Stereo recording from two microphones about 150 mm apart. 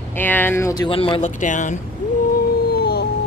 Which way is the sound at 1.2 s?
55° left (ahead or behind).